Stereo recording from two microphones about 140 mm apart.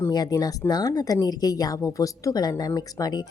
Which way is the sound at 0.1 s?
30° left (ahead or behind).